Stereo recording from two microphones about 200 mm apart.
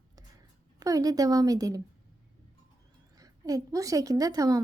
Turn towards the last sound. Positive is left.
turn(degrees=-20)  # may be behind; listen again after turning